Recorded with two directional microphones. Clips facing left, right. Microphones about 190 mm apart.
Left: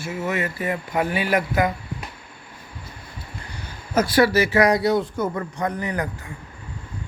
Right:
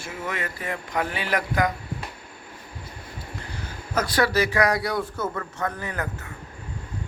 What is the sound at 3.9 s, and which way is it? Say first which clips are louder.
Speech: left 5 dB; 10° left (ahead or behind).